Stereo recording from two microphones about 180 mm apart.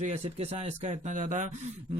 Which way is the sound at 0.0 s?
35° right (ahead or behind).